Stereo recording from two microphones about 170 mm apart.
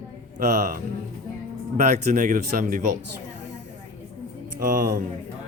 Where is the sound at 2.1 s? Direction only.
50° right (ahead or behind).